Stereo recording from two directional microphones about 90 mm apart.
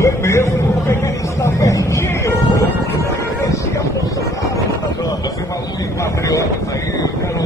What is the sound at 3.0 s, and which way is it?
Music, 30° left (ahead or behind).